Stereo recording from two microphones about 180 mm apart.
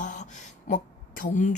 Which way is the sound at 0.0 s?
45° left (ahead or behind).